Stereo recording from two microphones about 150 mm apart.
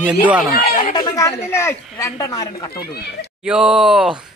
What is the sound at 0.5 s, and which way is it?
Speech, 60° left (ahead or behind).